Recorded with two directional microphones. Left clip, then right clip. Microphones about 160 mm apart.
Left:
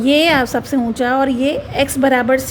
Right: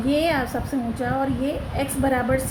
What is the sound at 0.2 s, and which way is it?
A woman's voice, 90° left.